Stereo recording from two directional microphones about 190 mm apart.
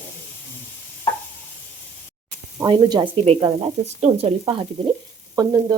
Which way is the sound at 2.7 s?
25° right (ahead or behind).